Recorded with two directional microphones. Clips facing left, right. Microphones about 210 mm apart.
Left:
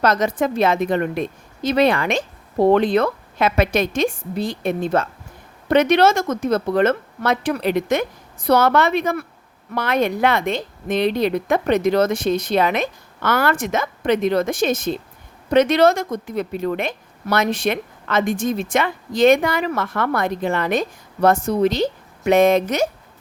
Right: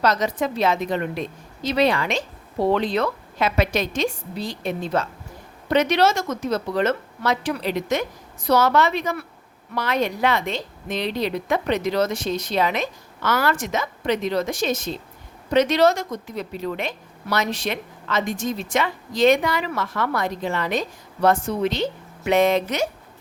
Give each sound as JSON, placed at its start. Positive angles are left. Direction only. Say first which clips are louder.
{"t": 0.0, "sound": "a woman's voice", "louder": "left 3 dB", "side_deg": 50}